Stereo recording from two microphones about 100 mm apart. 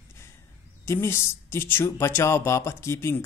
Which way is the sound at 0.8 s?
25° left (ahead or behind).